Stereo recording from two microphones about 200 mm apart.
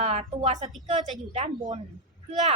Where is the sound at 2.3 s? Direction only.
35° right (ahead or behind).